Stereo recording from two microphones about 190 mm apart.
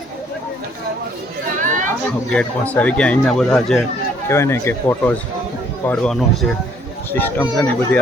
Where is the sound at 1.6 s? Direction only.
40° right (ahead or behind).